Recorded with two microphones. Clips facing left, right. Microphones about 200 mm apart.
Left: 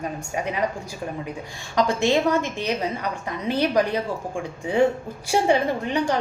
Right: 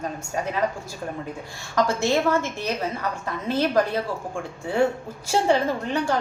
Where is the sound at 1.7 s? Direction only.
15° left (ahead or behind).